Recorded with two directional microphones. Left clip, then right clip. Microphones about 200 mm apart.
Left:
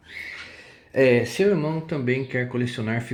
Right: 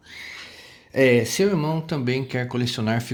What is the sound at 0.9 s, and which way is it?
Speech, 50° right (ahead or behind).